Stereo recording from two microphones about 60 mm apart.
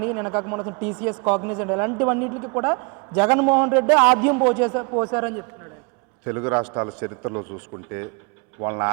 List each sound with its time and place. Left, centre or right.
0.0 s a man's voice: right
6.8 s a man's voice: right